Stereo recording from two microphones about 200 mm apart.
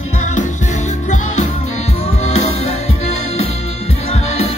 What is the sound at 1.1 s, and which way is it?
Music, 35° left (ahead or behind).